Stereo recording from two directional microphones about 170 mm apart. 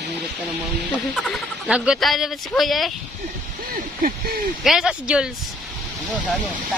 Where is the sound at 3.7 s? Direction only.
60° right (ahead or behind).